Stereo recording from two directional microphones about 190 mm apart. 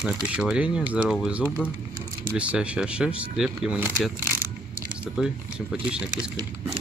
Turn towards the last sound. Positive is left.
turn(degrees=-20)  # may be behind; listen again after turning